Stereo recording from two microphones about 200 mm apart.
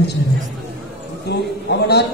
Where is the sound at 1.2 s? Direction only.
55° left (ahead or behind).